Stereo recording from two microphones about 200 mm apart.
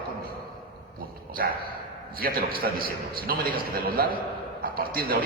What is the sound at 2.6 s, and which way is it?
A man's voice, 50° right (ahead or behind).